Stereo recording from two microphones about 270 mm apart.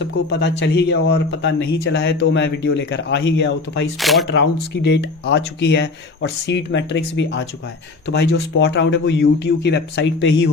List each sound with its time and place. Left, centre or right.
0.0 s a man's voice: left
4.0 s speech: centre
4.3 s a man's voice: left